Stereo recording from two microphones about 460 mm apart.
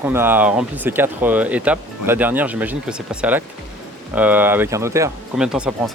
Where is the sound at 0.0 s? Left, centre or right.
Centre.